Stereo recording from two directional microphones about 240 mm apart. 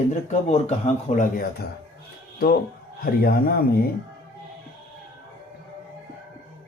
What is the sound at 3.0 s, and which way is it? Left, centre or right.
Speech, left.